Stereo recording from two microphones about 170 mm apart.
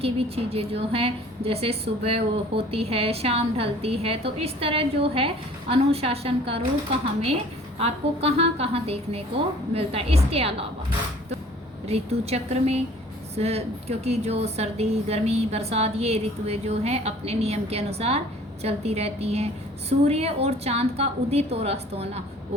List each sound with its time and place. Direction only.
0.0 s a woman's voice: 35° right (ahead or behind)
7.8 s a woman's voice: 35° right (ahead or behind)
11.9 s a woman's voice: 35° right (ahead or behind)